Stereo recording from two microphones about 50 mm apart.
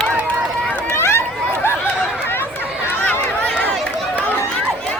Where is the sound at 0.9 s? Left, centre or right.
Left.